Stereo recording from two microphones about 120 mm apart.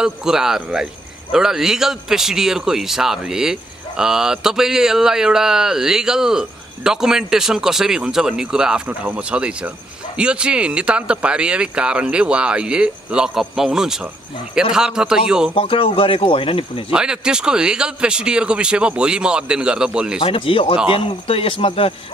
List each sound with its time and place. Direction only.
0.0 s a man's voice: 5° right (ahead or behind)
15.5 s speech: 50° left (ahead or behind)
16.9 s speech: 5° right (ahead or behind)
20.2 s speech: 45° left (ahead or behind)